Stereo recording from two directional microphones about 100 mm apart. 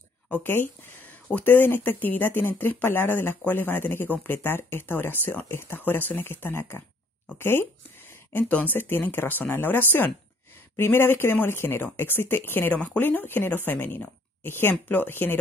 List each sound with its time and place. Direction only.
0.3 s speech: 20° left (ahead or behind)